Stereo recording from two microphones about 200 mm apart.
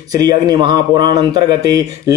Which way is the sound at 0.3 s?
20° right (ahead or behind).